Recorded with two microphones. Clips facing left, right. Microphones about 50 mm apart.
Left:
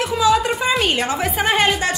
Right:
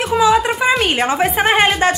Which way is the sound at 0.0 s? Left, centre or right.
Right.